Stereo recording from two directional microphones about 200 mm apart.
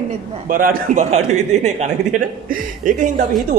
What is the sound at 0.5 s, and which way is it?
A man's voice, 45° right (ahead or behind).